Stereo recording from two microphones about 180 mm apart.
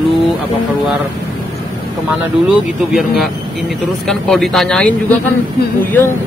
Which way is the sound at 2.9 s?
Centre (ahead or behind).